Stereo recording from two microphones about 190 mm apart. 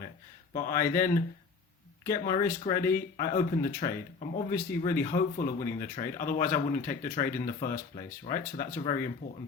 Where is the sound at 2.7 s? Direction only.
50° left (ahead or behind).